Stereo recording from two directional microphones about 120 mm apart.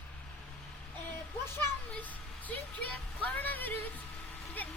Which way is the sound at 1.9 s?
15° left (ahead or behind).